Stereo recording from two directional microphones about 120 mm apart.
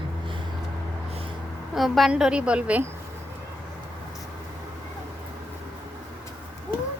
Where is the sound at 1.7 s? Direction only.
Centre (ahead or behind).